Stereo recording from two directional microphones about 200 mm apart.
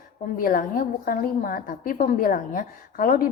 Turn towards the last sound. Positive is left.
turn(degrees=45)  # may be behind; listen again after turning